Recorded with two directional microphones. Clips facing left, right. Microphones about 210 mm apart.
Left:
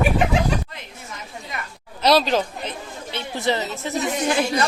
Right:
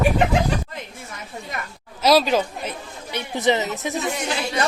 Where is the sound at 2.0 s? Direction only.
10° right (ahead or behind).